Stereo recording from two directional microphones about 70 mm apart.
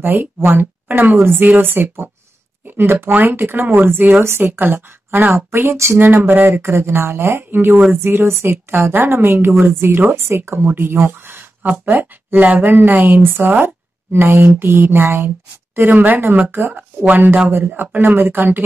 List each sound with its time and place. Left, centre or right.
0.0 s speech: right
3.1 s a woman's voice: right